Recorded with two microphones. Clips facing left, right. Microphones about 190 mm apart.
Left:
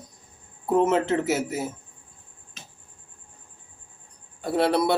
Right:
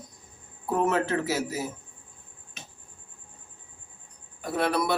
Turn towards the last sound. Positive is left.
turn(degrees=30)  # may be behind; listen again after turning